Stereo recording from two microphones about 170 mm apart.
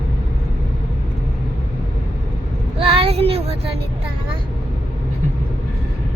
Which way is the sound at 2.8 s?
35° right (ahead or behind).